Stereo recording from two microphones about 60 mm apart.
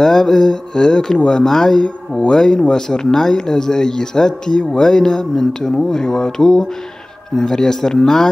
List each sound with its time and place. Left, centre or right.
0.0 s speech: centre